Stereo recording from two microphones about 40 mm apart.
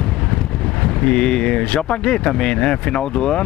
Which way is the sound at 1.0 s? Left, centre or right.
Left.